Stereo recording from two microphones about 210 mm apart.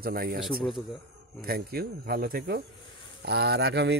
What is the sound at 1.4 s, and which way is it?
Speech, 45° right (ahead or behind).